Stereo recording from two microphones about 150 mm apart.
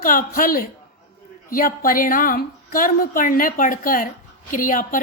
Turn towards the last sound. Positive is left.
turn(degrees=65)  # may be behind; listen again after turning